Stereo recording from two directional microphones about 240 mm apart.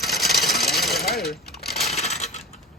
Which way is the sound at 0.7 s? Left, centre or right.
Centre.